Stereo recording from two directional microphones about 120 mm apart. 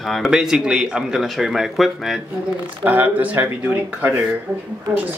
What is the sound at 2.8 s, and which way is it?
Speech, 15° right (ahead or behind).